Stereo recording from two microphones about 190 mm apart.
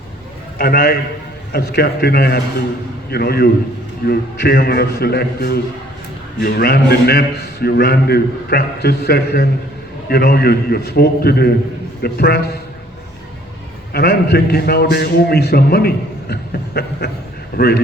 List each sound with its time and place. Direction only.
0.6 s a man's voice: 50° left (ahead or behind)
13.9 s a man's voice: 55° left (ahead or behind)